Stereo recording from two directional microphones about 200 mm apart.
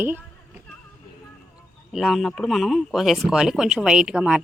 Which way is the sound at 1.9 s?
Centre (ahead or behind).